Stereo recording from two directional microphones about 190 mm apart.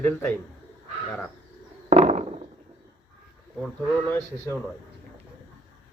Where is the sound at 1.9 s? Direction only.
35° right (ahead or behind).